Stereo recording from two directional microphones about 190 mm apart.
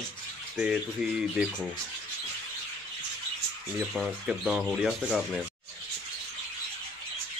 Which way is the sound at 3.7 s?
5° right (ahead or behind).